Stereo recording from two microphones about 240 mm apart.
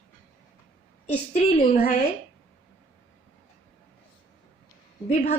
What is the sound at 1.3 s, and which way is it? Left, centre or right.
Speech, left.